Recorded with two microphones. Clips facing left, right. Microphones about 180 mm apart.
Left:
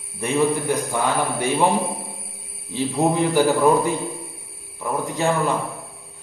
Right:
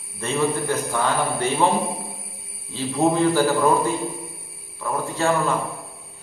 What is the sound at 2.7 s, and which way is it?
A man's voice, 15° left (ahead or behind).